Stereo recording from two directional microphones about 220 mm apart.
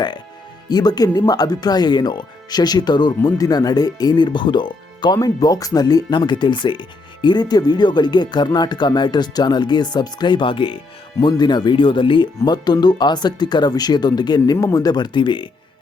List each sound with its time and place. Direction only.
0.7 s speech: 15° left (ahead or behind)